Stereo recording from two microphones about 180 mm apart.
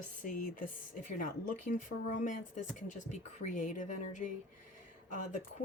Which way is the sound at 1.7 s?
45° left (ahead or behind).